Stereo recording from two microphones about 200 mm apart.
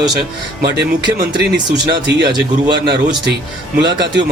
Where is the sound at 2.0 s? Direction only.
55° right (ahead or behind).